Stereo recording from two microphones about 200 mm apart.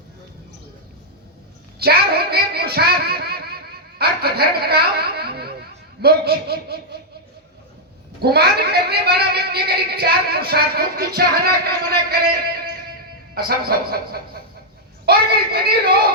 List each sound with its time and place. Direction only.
1.8 s speech: 50° right (ahead or behind)
8.2 s speech: 50° right (ahead or behind)
13.3 s speech: 50° right (ahead or behind)